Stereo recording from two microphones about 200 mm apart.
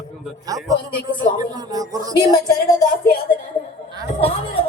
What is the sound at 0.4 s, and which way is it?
A man's voice, 15° right (ahead or behind).